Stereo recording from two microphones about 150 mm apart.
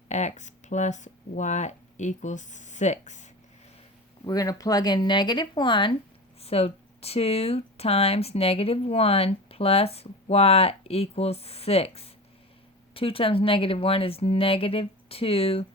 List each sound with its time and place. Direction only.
0.1 s speech: 50° left (ahead or behind)
4.3 s speech: 25° left (ahead or behind); by 15.6 s 40° left (ahead or behind)